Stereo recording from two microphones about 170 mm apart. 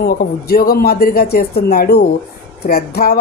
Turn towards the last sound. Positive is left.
turn(degrees=65)  # may be behind; listen again after turning